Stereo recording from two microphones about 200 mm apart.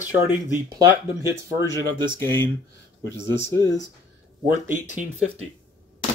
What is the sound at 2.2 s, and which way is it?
A man's voice, 10° left (ahead or behind).